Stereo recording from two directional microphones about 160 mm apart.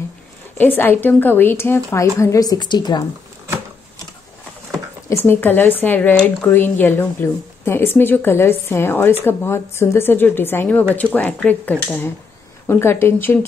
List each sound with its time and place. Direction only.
0.6 s speech: 10° left (ahead or behind); by 3.0 s 25° left (ahead or behind)
5.1 s speech: 15° left (ahead or behind)